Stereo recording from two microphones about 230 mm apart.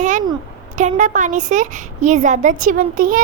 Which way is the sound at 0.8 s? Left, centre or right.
Right.